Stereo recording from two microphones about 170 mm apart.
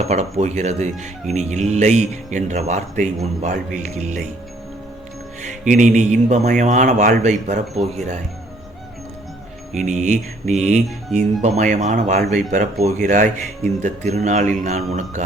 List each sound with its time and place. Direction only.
0.0 s speech: 40° right (ahead or behind)
5.4 s speech: 45° right (ahead or behind)
9.7 s speech: 45° right (ahead or behind)